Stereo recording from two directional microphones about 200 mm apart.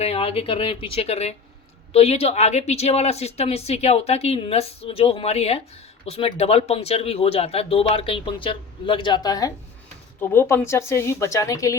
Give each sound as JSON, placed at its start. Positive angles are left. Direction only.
{"t": 0.0, "sound": "a woman's voice", "side_deg": 30}